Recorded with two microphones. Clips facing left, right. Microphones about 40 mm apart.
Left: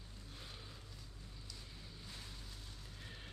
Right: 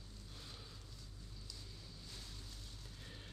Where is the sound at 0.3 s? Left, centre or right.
Centre.